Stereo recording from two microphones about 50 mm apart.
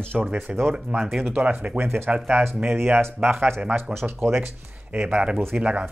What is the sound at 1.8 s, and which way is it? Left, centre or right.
Speech, right.